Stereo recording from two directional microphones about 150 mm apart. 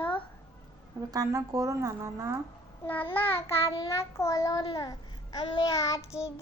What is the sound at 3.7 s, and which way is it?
Child singing, 20° left (ahead or behind).